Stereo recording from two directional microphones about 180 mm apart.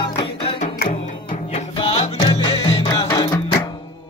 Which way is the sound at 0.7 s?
45° left (ahead or behind).